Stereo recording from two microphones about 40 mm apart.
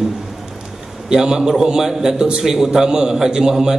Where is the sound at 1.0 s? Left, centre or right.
Centre.